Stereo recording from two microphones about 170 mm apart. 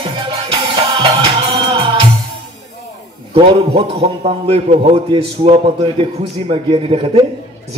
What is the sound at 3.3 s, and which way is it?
A man's voice, 30° right (ahead or behind).